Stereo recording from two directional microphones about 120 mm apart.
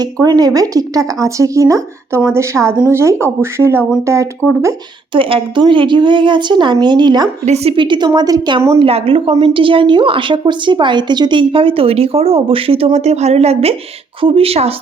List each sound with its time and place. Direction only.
0.0 s speech: 35° right (ahead or behind)
5.1 s a woman's voice: 45° right (ahead or behind)
7.4 s a woman's voice: 60° right (ahead or behind)
7.8 s a woman's voice: 40° right (ahead or behind)
8.8 s a woman's voice: 50° right (ahead or behind)